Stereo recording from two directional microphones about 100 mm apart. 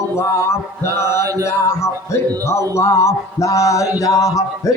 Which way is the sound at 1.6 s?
30° left (ahead or behind).